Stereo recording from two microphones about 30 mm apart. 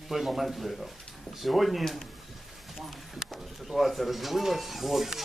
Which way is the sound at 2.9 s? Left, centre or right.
Centre.